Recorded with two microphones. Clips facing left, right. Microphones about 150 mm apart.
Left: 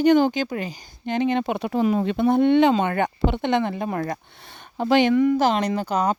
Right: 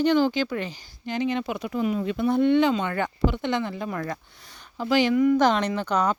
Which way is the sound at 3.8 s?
35° left (ahead or behind).